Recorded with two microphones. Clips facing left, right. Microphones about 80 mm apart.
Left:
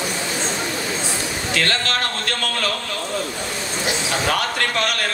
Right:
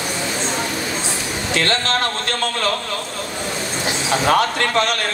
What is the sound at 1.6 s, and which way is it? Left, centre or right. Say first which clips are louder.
Speech: right 3 dB; right.